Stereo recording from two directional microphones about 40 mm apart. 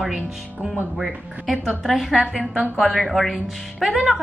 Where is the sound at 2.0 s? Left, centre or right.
Centre.